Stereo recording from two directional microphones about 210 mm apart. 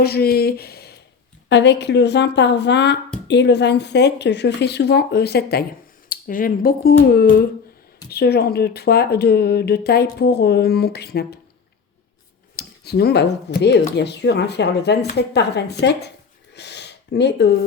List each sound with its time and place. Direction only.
0.0 s speech: 50° left (ahead or behind)
12.5 s speech: 50° left (ahead or behind)
16.6 s a sound: 55° left (ahead or behind)